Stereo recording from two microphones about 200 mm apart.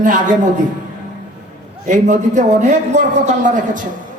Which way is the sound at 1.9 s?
35° right (ahead or behind).